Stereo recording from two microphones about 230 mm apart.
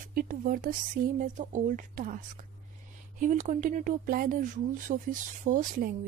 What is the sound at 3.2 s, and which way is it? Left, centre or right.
A woman's voice, right.